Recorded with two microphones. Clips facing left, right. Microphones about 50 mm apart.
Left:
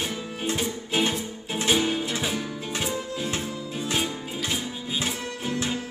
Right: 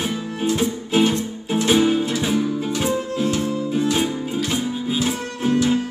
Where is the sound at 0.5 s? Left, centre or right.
Centre.